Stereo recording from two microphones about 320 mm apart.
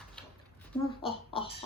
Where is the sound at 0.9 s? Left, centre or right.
Centre.